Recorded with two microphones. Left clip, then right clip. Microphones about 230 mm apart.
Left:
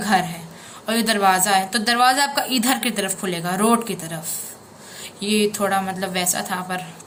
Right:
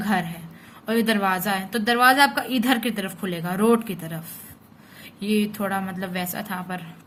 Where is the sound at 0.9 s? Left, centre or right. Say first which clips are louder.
Left 4 dB; right.